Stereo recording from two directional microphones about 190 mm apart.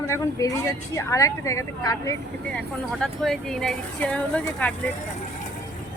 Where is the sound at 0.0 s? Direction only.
15° left (ahead or behind).